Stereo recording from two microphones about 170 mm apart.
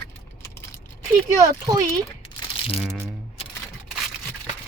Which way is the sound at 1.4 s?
20° right (ahead or behind).